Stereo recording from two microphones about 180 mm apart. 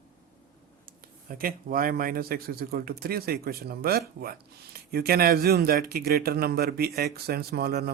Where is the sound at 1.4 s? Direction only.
55° right (ahead or behind).